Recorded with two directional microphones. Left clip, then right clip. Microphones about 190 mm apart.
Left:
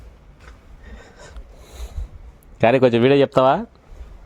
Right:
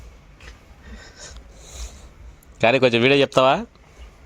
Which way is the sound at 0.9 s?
40° left (ahead or behind).